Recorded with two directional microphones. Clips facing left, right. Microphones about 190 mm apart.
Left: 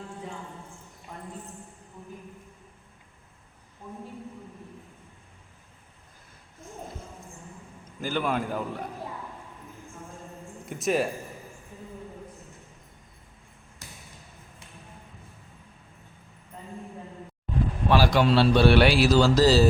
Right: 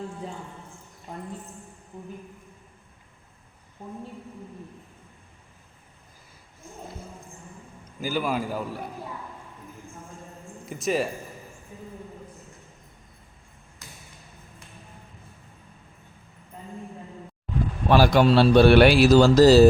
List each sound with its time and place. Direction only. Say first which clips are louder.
8.0 s a man's voice: right 1 dB; 5° right (ahead or behind)
10.7 s a man's voice: even; centre (ahead or behind)
17.8 s a man's voice: right 4 dB; 50° right (ahead or behind)